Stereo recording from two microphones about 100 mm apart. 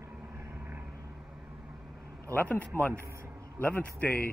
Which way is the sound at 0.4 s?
20° right (ahead or behind).